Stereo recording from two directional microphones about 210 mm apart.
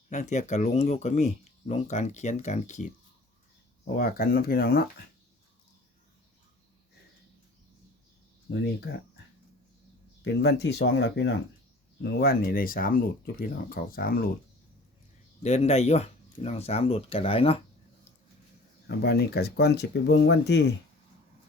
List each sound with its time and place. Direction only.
0.1 s speech: 35° left (ahead or behind)
3.8 s speech: 45° left (ahead or behind)
8.4 s speech: 55° left (ahead or behind)
10.2 s speech: 55° left (ahead or behind)
15.4 s speech: 30° left (ahead or behind)
18.9 s speech: 50° left (ahead or behind)